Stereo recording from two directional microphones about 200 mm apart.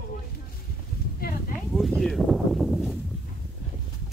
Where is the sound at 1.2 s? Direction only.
50° left (ahead or behind).